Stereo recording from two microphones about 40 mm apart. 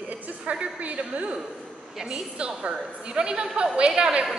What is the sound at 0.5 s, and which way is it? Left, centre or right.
Speech, right.